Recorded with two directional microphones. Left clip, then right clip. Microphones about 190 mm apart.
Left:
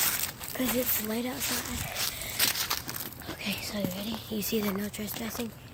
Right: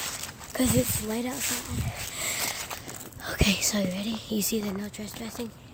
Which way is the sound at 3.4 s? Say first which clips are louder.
Right 8 dB; 55° right (ahead or behind).